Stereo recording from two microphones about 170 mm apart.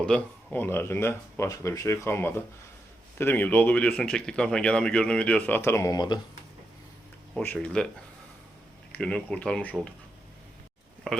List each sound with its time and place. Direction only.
0.0 s speech: 10° left (ahead or behind)
7.3 s speech: 5° left (ahead or behind)
8.9 s speech: 5° left (ahead or behind)
11.1 s a sound: centre (ahead or behind)